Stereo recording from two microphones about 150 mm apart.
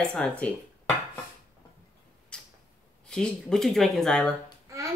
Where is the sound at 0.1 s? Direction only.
5° left (ahead or behind).